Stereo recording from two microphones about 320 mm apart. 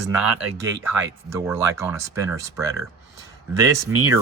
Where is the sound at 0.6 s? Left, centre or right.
Centre.